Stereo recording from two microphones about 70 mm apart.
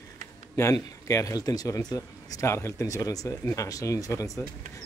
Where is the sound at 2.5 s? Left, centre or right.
Left.